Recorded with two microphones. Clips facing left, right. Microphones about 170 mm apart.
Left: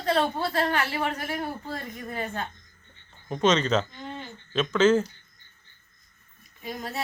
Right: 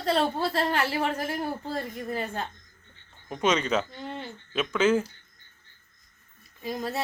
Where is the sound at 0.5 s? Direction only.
30° right (ahead or behind).